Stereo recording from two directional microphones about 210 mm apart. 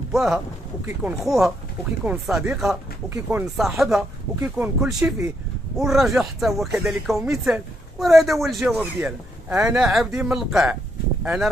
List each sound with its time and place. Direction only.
0.1 s speech: centre (ahead or behind)